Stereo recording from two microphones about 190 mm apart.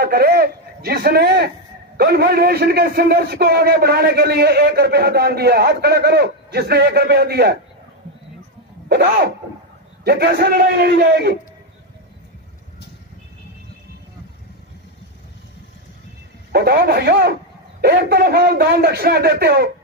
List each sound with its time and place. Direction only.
0.0 s a man's voice: 55° right (ahead or behind)
8.8 s a man's voice: 55° right (ahead or behind)
16.5 s a man's voice: 55° right (ahead or behind)